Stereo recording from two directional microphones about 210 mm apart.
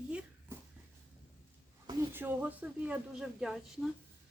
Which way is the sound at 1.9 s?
10° right (ahead or behind).